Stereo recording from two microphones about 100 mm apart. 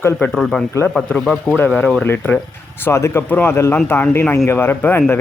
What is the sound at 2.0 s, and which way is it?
Speech, 20° left (ahead or behind).